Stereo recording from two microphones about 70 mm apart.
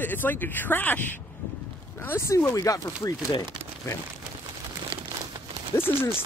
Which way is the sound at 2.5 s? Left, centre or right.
Left.